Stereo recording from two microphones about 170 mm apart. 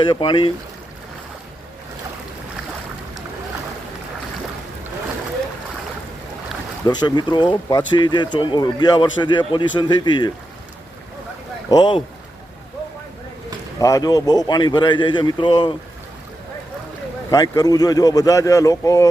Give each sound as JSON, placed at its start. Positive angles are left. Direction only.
{"t": 0.1, "sound": "speech", "side_deg": 30}
{"t": 6.8, "sound": "speech", "side_deg": 25}
{"t": 11.7, "sound": "speech", "side_deg": 25}
{"t": 13.7, "sound": "speech", "side_deg": 20}
{"t": 17.3, "sound": "speech", "side_deg": 20}